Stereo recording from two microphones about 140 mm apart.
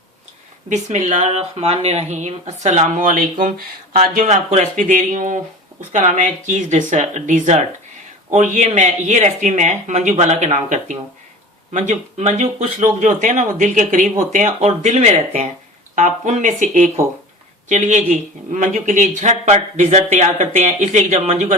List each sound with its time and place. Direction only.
0.7 s speech: 55° right (ahead or behind)
3.9 s speech: 80° right; by 21.5 s 55° right (ahead or behind)